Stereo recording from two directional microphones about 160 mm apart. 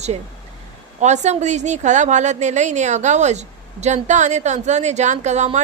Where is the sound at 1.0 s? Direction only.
45° right (ahead or behind).